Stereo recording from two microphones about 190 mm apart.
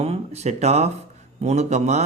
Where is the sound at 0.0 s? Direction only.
35° right (ahead or behind).